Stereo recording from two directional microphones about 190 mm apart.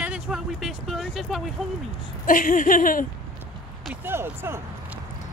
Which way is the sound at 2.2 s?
45° left (ahead or behind).